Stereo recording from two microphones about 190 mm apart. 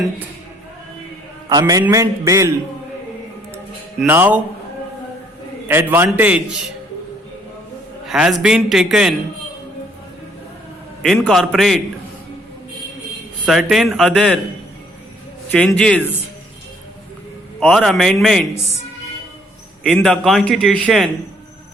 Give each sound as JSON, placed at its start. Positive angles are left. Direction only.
{"t": 1.5, "sound": "a man's voice", "side_deg": -20}
{"t": 4.0, "sound": "a man's voice", "side_deg": -10}
{"t": 5.6, "sound": "a man's voice", "side_deg": -10}
{"t": 8.0, "sound": "a man's voice", "side_deg": 0}
{"t": 11.0, "sound": "a man's voice", "side_deg": 5}
{"t": 13.4, "sound": "a man's voice", "side_deg": 0}
{"t": 15.4, "sound": "a man's voice", "side_deg": 5}
{"t": 17.6, "sound": "a man's voice", "side_deg": 0}
{"t": 19.8, "sound": "a man's voice", "side_deg": 0}